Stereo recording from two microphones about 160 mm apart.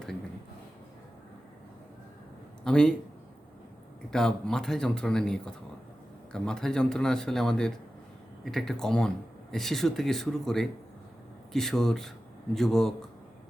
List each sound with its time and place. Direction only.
2.6 s speech: 5° left (ahead or behind)
4.1 s speech: 5° left (ahead or behind)